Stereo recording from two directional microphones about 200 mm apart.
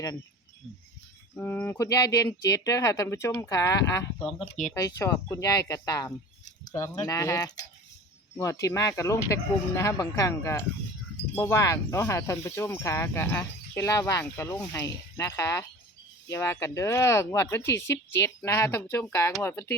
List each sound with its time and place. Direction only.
1.4 s speech: 10° left (ahead or behind)
4.2 s speech: centre (ahead or behind)
4.8 s speech: 15° left (ahead or behind)